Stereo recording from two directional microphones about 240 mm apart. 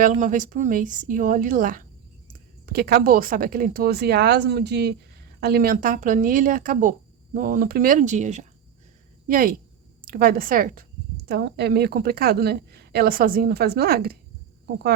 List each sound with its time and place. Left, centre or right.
0.0 s a woman's voice: right